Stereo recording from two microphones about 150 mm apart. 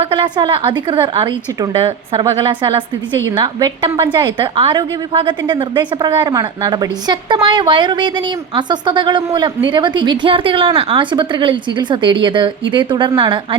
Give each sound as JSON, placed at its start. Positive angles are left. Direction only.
{"t": 0.0, "sound": "a woman's voice", "side_deg": -30}